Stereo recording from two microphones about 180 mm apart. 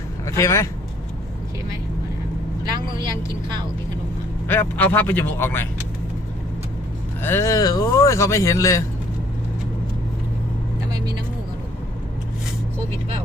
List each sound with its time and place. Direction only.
0.3 s speech: 15° left (ahead or behind)
4.4 s speech: 10° left (ahead or behind)
7.2 s speech: 15° left (ahead or behind)
10.9 s vehicle: 25° right (ahead or behind)